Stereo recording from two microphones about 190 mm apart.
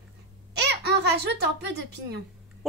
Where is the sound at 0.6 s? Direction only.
60° right (ahead or behind).